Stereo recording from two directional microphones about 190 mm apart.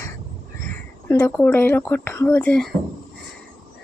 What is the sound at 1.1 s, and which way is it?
Speech, 10° left (ahead or behind).